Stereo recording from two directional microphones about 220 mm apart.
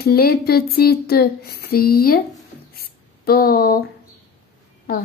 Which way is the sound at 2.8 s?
45° left (ahead or behind).